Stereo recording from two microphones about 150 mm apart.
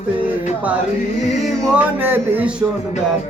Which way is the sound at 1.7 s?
10° right (ahead or behind).